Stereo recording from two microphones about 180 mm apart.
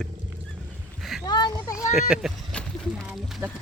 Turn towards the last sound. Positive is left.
turn(degrees=-5)  # may be behind; listen again after turning